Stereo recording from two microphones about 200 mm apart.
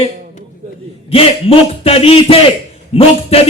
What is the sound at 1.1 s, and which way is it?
Music, 30° left (ahead or behind).